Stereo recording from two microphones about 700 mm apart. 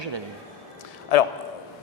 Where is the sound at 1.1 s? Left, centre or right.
Left.